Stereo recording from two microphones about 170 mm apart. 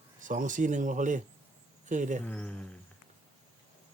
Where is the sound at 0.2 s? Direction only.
50° right (ahead or behind).